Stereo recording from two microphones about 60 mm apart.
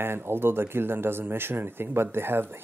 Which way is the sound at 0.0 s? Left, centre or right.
Right.